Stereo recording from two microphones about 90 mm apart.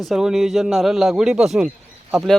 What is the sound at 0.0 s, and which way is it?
Speech, 5° right (ahead or behind).